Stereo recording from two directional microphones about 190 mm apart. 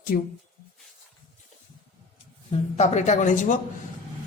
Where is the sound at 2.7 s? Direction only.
35° left (ahead or behind).